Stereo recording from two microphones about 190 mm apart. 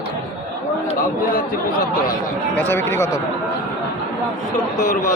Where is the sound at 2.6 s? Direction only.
10° left (ahead or behind).